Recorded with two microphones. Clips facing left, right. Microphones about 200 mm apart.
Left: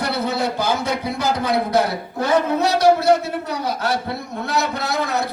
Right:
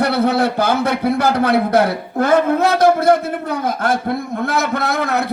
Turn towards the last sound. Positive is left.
turn(degrees=-55)  # may be behind; listen again after turning